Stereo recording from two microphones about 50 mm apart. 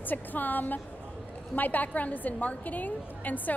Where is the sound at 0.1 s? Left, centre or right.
Left.